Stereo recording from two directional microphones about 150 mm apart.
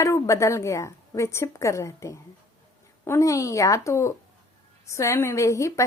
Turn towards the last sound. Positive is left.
turn(degrees=20)  # may be behind; listen again after turning